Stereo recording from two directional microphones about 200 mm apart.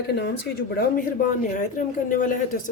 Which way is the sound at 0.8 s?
40° left (ahead or behind).